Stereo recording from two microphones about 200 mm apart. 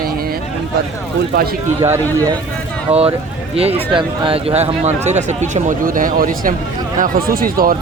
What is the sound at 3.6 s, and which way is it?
Speech, 30° right (ahead or behind).